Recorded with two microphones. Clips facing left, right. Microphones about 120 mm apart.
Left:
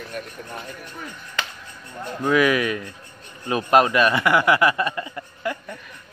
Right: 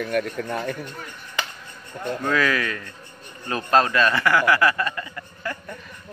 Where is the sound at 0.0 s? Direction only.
85° right.